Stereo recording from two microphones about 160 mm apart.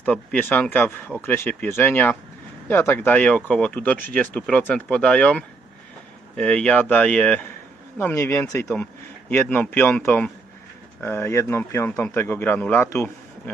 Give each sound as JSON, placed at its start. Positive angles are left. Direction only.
{"t": 0.0, "sound": "a man's voice", "side_deg": 10}